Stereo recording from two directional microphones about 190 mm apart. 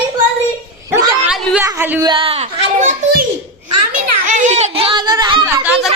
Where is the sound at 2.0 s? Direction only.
30° right (ahead or behind).